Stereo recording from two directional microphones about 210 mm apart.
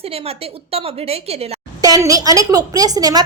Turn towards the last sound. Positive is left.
turn(degrees=-20)  # may be behind; listen again after turning